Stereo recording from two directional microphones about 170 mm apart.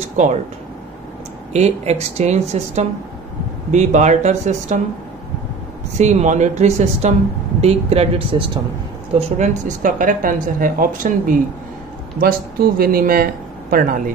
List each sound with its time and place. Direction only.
0.2 s speech: 45° right (ahead or behind)
1.5 s speech: 40° right (ahead or behind)
5.9 s speech: 45° right (ahead or behind)
9.1 s speech: 45° right (ahead or behind)